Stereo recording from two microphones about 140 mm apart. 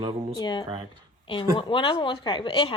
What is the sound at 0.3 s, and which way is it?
Speech, 30° left (ahead or behind).